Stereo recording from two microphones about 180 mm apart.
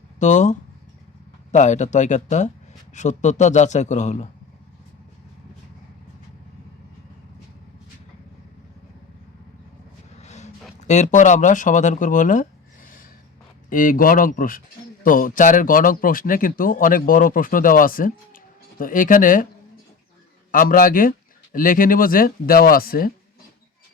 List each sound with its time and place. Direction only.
0.2 s a man's voice: 45° left (ahead or behind)
1.5 s a man's voice: 40° left (ahead or behind)
10.2 s vehicle: 40° left (ahead or behind)
10.8 s a man's voice: 40° left (ahead or behind)
20.5 s a man's voice: 50° left (ahead or behind)